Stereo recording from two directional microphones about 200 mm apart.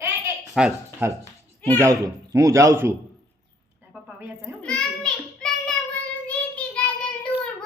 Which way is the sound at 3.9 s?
5° right (ahead or behind).